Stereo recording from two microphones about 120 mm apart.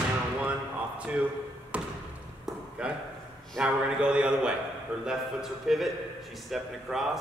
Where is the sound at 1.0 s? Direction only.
10° right (ahead or behind).